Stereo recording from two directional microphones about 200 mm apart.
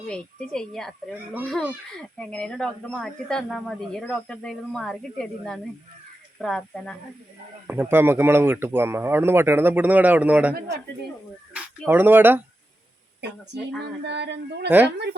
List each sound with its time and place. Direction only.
0.1 s speech: 5° left (ahead or behind)
1.1 s speech: 10° right (ahead or behind)
2.0 s speech: 5° left (ahead or behind)
7.7 s speech: 10° right (ahead or behind)
11.5 s speech: 10° right (ahead or behind)
14.0 s a sound: 55° right (ahead or behind)